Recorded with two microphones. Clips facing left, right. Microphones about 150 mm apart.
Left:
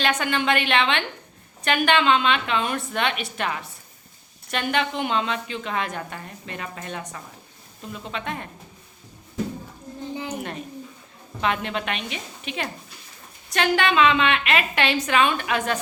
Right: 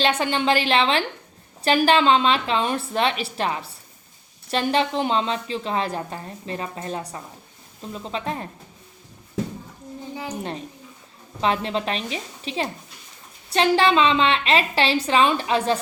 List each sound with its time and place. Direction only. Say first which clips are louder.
0.0 s a woman's voice: right 2 dB; 30° right (ahead or behind)
11.3 s a woman's voice: right 3 dB; 30° right (ahead or behind)